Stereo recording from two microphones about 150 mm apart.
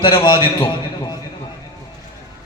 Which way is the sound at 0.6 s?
25° left (ahead or behind).